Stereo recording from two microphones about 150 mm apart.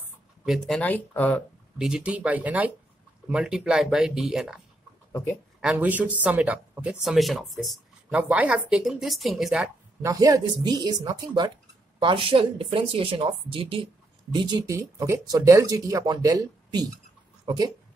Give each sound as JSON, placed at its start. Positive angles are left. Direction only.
{"t": 0.5, "sound": "speech", "side_deg": 5}
{"t": 1.8, "sound": "speech", "side_deg": -5}
{"t": 5.1, "sound": "speech", "side_deg": 15}
{"t": 5.6, "sound": "speech", "side_deg": -10}
{"t": 10.0, "sound": "speech", "side_deg": -20}